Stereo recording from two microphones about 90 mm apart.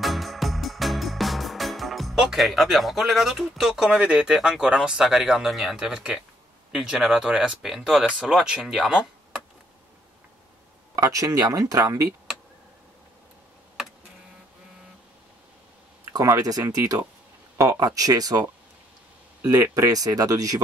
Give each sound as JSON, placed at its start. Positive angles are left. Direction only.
{"t": 0.0, "sound": "music", "side_deg": 0}
{"t": 6.7, "sound": "speech", "side_deg": -5}
{"t": 11.0, "sound": "speech", "side_deg": -40}
{"t": 16.1, "sound": "speech", "side_deg": -40}
{"t": 19.5, "sound": "speech", "side_deg": -40}